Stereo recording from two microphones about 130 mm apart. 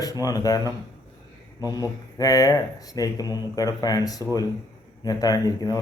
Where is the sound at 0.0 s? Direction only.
30° left (ahead or behind).